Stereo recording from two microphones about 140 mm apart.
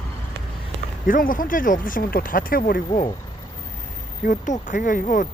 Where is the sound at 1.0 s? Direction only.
75° left (ahead or behind).